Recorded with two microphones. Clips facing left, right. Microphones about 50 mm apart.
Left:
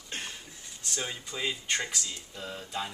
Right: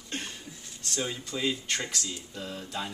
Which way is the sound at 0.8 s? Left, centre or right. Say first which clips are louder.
Right 3 dB; centre.